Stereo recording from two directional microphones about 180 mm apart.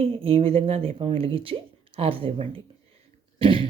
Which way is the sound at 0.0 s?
30° right (ahead or behind).